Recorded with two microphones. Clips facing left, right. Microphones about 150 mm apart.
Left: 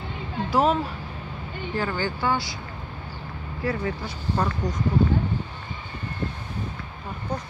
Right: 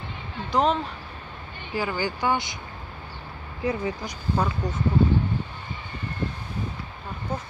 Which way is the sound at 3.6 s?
20° right (ahead or behind).